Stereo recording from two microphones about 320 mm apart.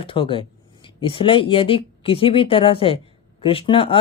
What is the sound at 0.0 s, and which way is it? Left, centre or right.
Speech, centre.